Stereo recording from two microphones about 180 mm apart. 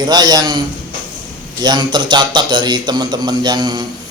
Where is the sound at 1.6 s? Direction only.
25° right (ahead or behind).